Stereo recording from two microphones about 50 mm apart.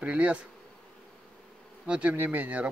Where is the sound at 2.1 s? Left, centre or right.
Right.